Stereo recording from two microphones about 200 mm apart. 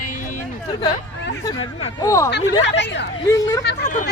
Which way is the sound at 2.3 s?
60° left (ahead or behind).